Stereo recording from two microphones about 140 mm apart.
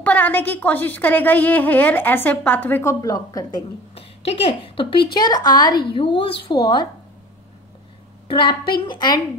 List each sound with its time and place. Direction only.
0.0 s a woman's voice: 10° left (ahead or behind); by 3.6 s 25° left (ahead or behind)
3.9 s a woman's voice: 45° left (ahead or behind)
8.3 s a woman's voice: 35° left (ahead or behind)